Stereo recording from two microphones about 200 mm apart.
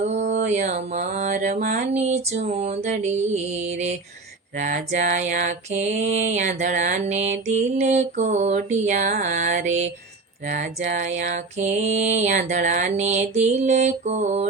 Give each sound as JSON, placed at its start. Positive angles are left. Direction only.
{"t": 0.3, "sound": "mantra", "side_deg": -35}
{"t": 10.9, "sound": "mantra", "side_deg": -35}